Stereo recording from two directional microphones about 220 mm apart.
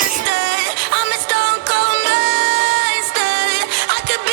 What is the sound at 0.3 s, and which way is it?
Music, 55° right (ahead or behind).